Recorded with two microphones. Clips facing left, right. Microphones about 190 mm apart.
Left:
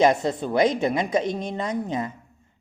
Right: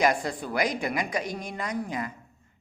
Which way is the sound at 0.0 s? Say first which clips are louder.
Left 6 dB; 25° left (ahead or behind).